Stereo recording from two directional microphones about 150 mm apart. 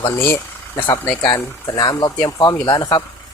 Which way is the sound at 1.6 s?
25° left (ahead or behind).